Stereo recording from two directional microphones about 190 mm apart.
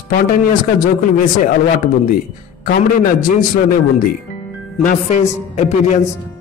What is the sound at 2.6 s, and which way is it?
A man's voice, 50° left (ahead or behind).